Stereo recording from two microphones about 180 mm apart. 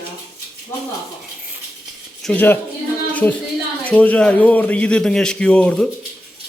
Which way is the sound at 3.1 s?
10° left (ahead or behind).